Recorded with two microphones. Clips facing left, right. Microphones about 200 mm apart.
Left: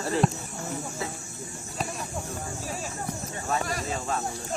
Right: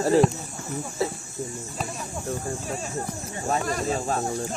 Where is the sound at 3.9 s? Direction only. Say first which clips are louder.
Right 5 dB; 40° right (ahead or behind).